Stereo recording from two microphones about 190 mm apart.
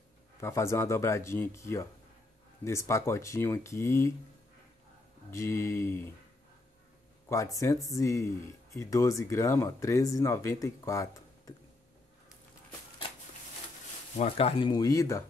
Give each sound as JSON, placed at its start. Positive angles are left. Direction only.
{"t": 0.4, "sound": "speech", "side_deg": 15}
{"t": 5.3, "sound": "speech", "side_deg": 15}
{"t": 7.2, "sound": "speech", "side_deg": 15}
{"t": 14.1, "sound": "speech", "side_deg": 35}